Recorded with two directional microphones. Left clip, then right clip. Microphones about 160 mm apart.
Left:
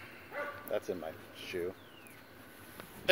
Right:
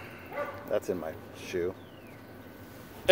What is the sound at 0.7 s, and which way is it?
Speech, 10° right (ahead or behind).